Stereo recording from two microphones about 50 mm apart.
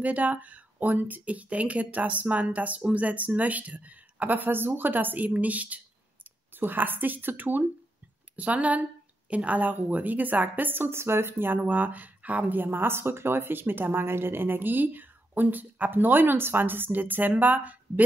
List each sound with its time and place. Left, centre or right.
0.0 s speech: right
11.6 s a woman's voice: right